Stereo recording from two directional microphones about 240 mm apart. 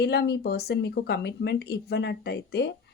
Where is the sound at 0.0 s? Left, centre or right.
Left.